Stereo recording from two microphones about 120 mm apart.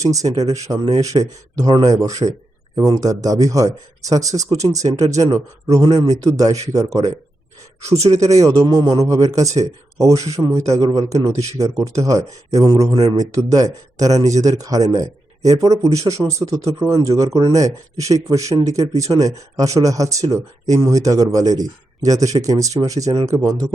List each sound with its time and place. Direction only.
0.0 s speech: 30° right (ahead or behind)
7.9 s speech: 60° right (ahead or behind)
8.6 s speech: 30° right (ahead or behind)